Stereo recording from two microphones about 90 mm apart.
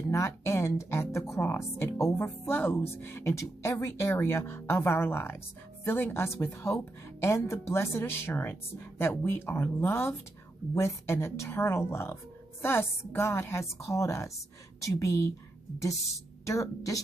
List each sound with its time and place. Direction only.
0.1 s speech: 35° left (ahead or behind)